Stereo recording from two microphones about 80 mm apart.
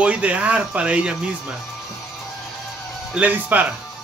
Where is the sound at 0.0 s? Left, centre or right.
Centre.